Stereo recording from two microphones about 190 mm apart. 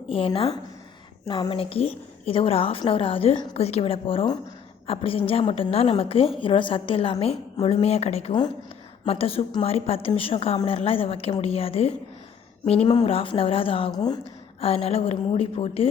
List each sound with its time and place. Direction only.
0.1 s a woman's voice: 30° left (ahead or behind)
14.6 s a woman's voice: 30° left (ahead or behind)